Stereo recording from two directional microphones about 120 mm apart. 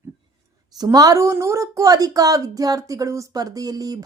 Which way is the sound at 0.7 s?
30° right (ahead or behind).